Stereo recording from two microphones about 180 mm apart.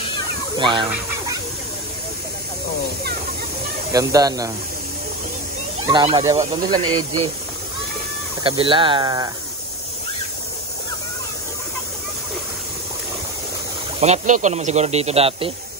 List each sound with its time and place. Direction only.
0.6 s speech: 25° right (ahead or behind)
3.9 s speech: 20° right (ahead or behind)
5.9 s speech: 25° right (ahead or behind)
8.5 s speech: 30° right (ahead or behind)
13.9 s speech: 35° right (ahead or behind)